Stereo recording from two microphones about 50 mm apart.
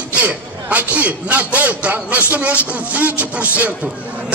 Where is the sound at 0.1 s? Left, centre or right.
Right.